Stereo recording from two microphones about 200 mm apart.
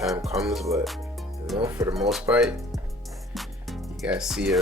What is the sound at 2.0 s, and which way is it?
Speech, centre (ahead or behind).